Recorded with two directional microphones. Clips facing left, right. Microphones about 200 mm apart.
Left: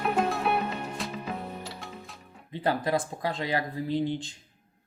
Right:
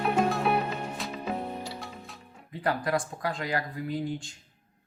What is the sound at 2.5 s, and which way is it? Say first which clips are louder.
Speech: left 1 dB; 25° left (ahead or behind).